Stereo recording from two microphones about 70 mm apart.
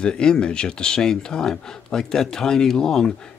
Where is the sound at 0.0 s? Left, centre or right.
Centre.